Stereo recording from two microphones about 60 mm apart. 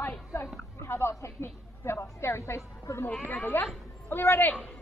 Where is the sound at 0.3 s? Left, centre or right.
Left.